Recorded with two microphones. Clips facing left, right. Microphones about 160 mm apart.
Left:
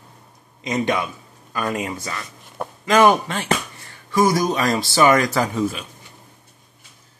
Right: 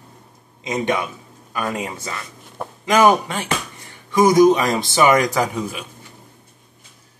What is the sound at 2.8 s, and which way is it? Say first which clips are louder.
Speech: even; 15° right (ahead or behind).